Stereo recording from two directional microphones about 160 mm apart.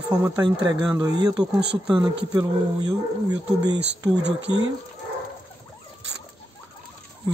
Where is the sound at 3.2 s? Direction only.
25° right (ahead or behind).